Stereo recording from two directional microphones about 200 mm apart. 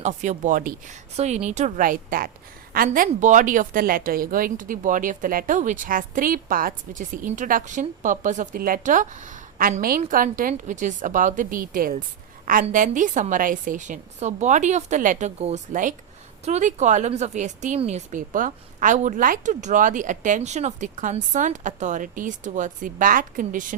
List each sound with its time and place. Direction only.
0.0 s a woman's voice: 35° right (ahead or behind)